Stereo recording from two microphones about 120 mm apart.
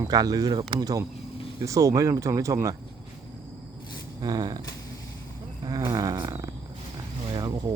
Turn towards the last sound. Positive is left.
turn(degrees=-35)  # may be behind; listen again after turning